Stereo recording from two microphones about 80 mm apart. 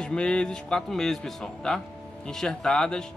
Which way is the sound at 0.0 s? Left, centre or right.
Centre.